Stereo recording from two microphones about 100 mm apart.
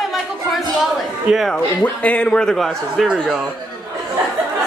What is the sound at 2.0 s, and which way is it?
A man's voice, 10° left (ahead or behind).